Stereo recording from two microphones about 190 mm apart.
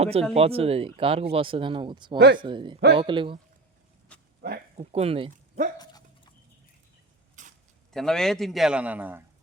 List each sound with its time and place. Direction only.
0.0 s speech: 30° right (ahead or behind)
2.1 s speech: 55° right (ahead or behind)
2.4 s speech: 25° right (ahead or behind)
4.1 s livestock: 5° left (ahead or behind)
4.9 s speech: 30° right (ahead or behind)
5.8 s dog: 20° left (ahead or behind)
7.4 s a sound: 40° right (ahead or behind)
7.9 s a man's voice: centre (ahead or behind)